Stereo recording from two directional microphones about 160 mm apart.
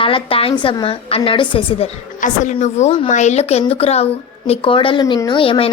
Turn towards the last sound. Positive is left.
turn(degrees=35)  # may be behind; listen again after turning